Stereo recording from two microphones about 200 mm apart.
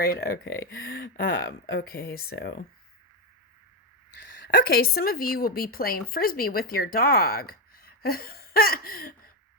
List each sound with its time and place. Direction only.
0.0 s speech: 50° left (ahead or behind)
4.4 s speech: 50° left (ahead or behind)